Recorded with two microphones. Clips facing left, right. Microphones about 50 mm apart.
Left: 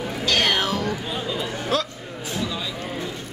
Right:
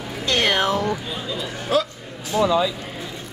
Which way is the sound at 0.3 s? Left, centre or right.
Right.